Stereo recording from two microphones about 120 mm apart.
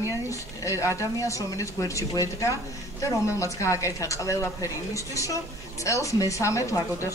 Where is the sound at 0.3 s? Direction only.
25° left (ahead or behind).